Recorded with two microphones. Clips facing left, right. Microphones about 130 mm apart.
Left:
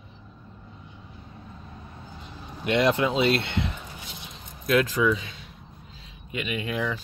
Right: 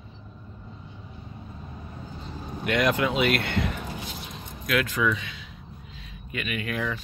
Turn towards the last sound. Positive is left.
turn(degrees=20)  # may be behind; listen again after turning